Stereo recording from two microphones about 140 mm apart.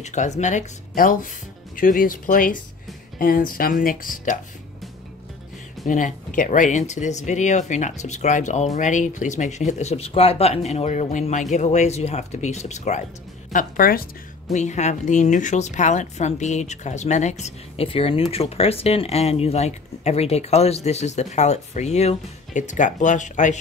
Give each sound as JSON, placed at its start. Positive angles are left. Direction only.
{"t": 0.0, "sound": "speech", "side_deg": 55}
{"t": 3.2, "sound": "speech", "side_deg": 90}
{"t": 5.9, "sound": "speech", "side_deg": 65}
{"t": 13.5, "sound": "speech", "side_deg": 80}
{"t": 14.5, "sound": "speech", "side_deg": 60}